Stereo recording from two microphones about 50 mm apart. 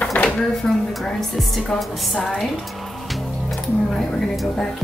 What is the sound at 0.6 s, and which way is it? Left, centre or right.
A woman's voice, centre.